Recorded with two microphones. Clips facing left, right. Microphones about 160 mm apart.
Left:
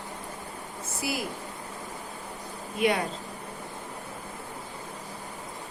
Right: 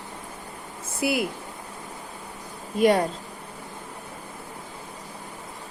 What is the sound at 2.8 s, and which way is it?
Speech, 40° right (ahead or behind).